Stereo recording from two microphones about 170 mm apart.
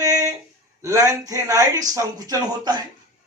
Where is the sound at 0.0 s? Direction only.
20° right (ahead or behind).